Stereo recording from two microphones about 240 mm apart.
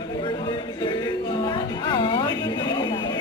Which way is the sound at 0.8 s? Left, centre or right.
Centre.